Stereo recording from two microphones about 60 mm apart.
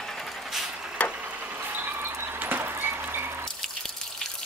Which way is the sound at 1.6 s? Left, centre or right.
Right.